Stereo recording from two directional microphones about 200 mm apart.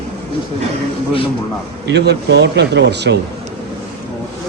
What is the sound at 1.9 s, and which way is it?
Speech, 60° right (ahead or behind).